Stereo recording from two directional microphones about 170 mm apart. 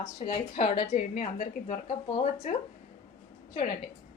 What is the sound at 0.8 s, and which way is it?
Speech, 45° left (ahead or behind).